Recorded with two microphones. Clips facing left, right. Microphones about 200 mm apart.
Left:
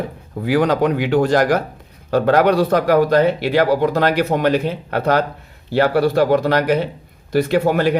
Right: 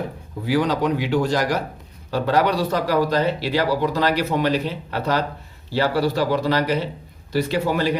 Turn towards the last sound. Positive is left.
turn(degrees=55)  # may be behind; listen again after turning